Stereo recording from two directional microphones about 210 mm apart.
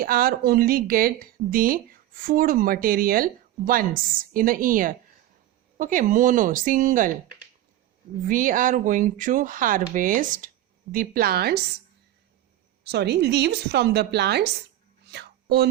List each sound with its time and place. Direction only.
0.0 s speech: 45° right (ahead or behind)
8.2 s speech: 40° right (ahead or behind)
12.8 s speech: 55° right (ahead or behind)
15.1 s whispering: 55° right (ahead or behind)